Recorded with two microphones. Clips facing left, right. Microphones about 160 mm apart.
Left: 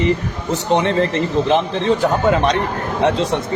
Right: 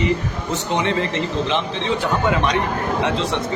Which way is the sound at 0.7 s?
40° left (ahead or behind).